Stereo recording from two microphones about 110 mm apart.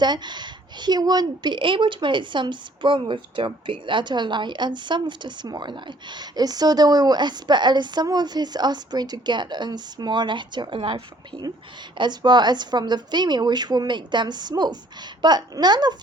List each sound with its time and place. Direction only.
0.0 s a woman's voice: 40° right (ahead or behind)